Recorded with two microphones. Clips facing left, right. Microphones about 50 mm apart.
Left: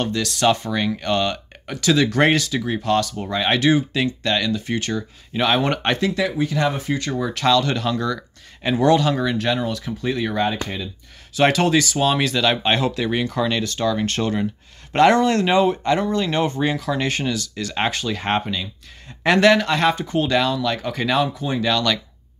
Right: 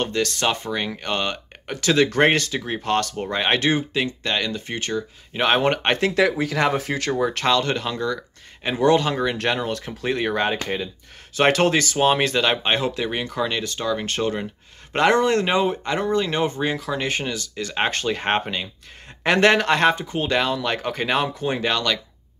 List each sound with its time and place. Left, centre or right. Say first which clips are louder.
0.0 s speech: left 3 dB; right
3.9 s speech: left 2 dB; right
6.1 s speech: right 2 dB; right
7.1 s speech: left 1 dB; right
9.4 s speech: left 1 dB; right
11.3 s speech: left 1 dB; right
17.9 s speech: even; right
19.6 s speech: right 1 dB; right
20.1 s speech: left 3 dB; right
20.5 s speech: left 1 dB; right